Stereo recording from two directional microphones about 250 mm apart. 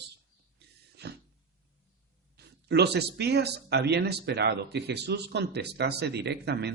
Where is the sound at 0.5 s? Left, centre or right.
Right.